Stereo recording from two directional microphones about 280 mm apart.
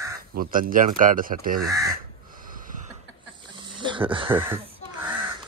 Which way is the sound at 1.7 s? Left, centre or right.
Centre.